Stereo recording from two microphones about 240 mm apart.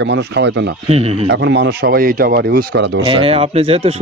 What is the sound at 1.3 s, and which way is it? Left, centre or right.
A man's voice, right.